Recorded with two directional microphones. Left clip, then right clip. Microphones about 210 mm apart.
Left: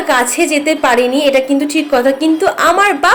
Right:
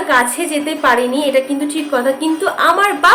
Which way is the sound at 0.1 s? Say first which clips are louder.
Left 3 dB; 25° left (ahead or behind).